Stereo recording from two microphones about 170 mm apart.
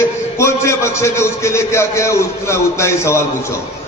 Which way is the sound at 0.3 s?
15° left (ahead or behind).